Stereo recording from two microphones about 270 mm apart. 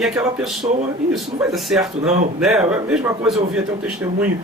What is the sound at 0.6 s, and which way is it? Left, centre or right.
Speech, centre.